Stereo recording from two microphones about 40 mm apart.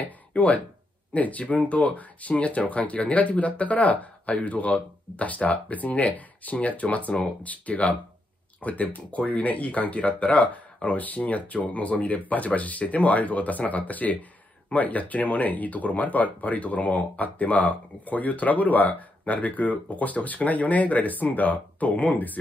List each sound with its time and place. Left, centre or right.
0.0 s speech: left